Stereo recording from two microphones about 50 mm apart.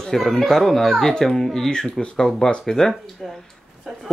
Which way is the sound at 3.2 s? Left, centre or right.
Centre.